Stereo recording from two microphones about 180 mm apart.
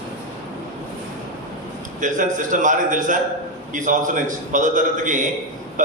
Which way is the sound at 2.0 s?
45° right (ahead or behind).